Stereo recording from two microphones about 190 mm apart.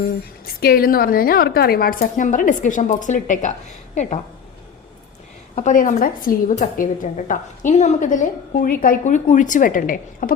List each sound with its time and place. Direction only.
0.4 s a woman's voice: 50° left (ahead or behind)
5.5 s a woman's voice: 45° left (ahead or behind)